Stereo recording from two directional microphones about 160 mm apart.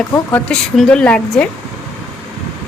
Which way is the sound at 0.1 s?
10° left (ahead or behind).